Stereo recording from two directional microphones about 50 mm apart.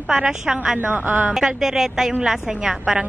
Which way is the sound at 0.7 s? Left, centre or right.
Right.